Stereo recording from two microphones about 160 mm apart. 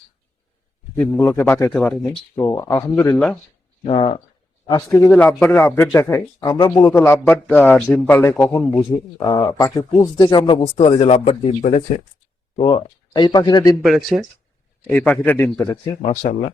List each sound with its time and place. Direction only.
0.9 s a man's voice: 10° left (ahead or behind)
1.7 s a man's voice: 5° left (ahead or behind)
3.8 s speech: 35° left (ahead or behind)
4.6 s speech: 20° left (ahead or behind)
5.0 s a man's voice: 10° left (ahead or behind); by 6.8 s 25° left (ahead or behind)
6.8 s a man's voice: 15° left (ahead or behind); by 12.0 s 45° left (ahead or behind)
12.5 s speech: 30° left (ahead or behind)
13.8 s a man's voice: centre (ahead or behind); by 15.8 s 15° left (ahead or behind)
15.9 s speech: 40° left (ahead or behind)